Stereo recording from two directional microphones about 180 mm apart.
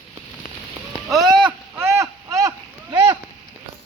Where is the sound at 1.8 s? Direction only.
15° right (ahead or behind).